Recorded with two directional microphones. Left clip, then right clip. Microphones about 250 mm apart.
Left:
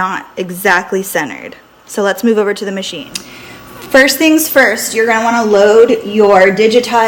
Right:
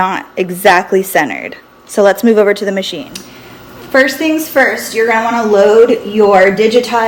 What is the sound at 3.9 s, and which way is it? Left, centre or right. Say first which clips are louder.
A woman's voice: left 3 dB; left.